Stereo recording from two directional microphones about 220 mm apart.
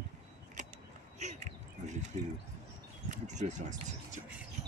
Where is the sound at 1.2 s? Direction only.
30° right (ahead or behind).